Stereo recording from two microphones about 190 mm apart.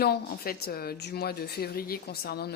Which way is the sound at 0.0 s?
55° left (ahead or behind).